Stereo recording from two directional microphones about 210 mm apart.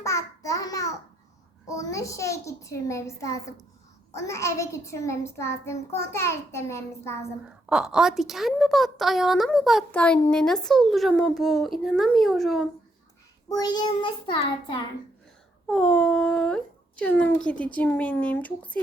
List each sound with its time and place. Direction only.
0.0 s babbling: 15° left (ahead or behind)
1.6 s a child's voice: 15° left (ahead or behind)
7.7 s a woman's voice: 5° right (ahead or behind)
13.5 s child singing: 20° left (ahead or behind)
15.6 s a woman's voice: centre (ahead or behind)